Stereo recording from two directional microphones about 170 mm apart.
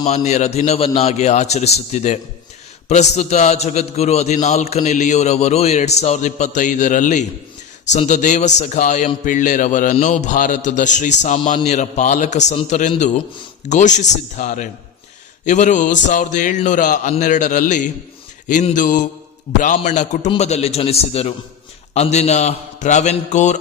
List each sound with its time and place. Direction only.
0.3 s a man's voice: 40° left (ahead or behind)